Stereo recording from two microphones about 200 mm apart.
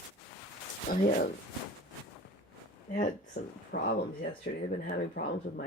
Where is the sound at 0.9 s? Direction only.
45° left (ahead or behind).